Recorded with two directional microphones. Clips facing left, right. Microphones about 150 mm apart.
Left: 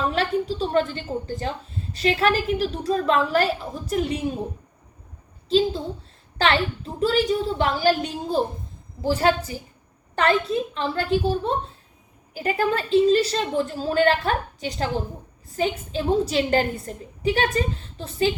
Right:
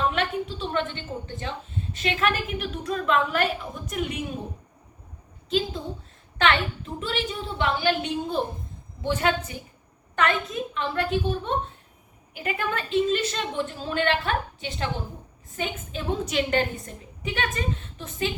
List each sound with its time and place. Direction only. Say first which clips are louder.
0.1 s a woman's voice: left 4 dB; 35° left (ahead or behind)
5.5 s a woman's voice: left 6 dB; 30° left (ahead or behind)
7.0 s a woman's voice: left 10 dB; 40° left (ahead or behind)